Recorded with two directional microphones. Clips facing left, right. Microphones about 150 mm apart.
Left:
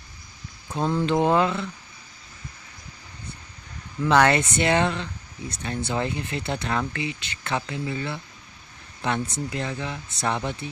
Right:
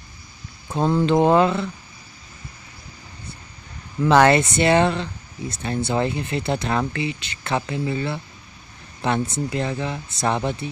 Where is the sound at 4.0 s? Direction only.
25° right (ahead or behind).